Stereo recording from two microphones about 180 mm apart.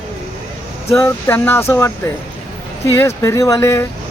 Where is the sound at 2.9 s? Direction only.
15° left (ahead or behind).